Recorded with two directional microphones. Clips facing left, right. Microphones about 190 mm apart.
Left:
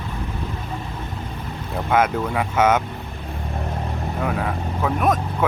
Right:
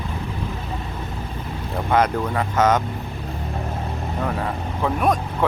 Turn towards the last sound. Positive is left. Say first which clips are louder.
# even
turn(degrees=0)  # may be behind; listen again after turning